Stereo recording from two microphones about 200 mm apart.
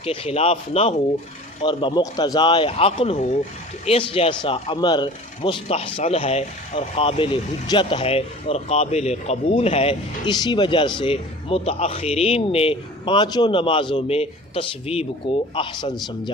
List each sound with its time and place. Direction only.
0.0 s speech: 30° left (ahead or behind)